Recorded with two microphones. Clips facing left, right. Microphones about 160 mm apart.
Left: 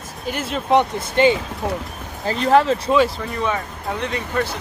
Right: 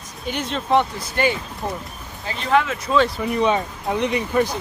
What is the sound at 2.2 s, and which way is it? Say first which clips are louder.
Speech: left 5 dB; 40° left (ahead or behind).